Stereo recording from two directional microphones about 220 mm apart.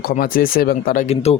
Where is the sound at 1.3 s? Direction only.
30° left (ahead or behind).